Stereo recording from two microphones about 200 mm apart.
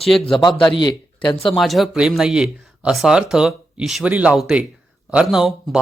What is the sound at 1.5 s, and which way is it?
A man's voice, centre (ahead or behind).